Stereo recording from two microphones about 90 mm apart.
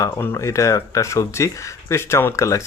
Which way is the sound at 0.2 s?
30° left (ahead or behind).